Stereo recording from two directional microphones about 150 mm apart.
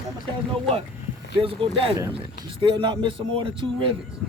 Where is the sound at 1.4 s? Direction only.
35° right (ahead or behind).